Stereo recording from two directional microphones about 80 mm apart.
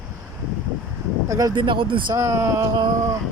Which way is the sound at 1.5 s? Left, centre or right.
Right.